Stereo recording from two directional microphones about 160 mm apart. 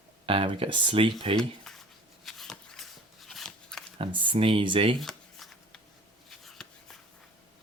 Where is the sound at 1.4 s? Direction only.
Centre (ahead or behind).